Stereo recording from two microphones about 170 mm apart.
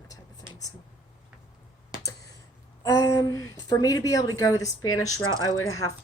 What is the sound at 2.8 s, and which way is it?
Speech, 20° left (ahead or behind).